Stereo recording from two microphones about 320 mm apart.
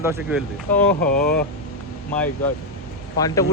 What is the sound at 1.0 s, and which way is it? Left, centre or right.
Speech, left.